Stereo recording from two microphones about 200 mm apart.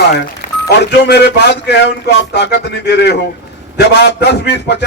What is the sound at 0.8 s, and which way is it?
Speech, 55° left (ahead or behind).